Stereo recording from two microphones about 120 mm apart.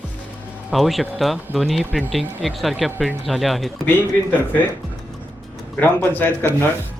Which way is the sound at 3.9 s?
15° left (ahead or behind).